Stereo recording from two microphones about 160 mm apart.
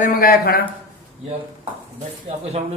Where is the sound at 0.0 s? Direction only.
65° left (ahead or behind).